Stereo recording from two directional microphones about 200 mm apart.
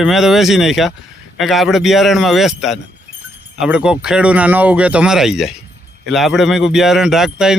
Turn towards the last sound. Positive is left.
turn(degrees=0)  # may be behind; listen again after turning